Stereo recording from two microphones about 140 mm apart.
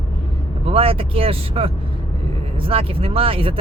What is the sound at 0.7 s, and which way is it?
Speech, 45° right (ahead or behind).